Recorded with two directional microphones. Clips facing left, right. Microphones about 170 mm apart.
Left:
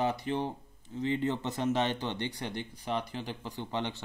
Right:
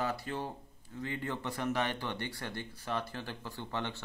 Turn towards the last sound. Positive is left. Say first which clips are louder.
# left 3 dB
turn(degrees=20)  # may be behind; listen again after turning